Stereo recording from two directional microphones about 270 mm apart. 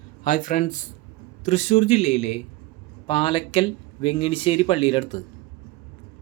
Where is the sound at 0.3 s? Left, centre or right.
Left.